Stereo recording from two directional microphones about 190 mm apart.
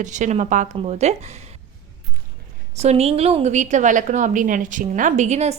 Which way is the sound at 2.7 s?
35° right (ahead or behind).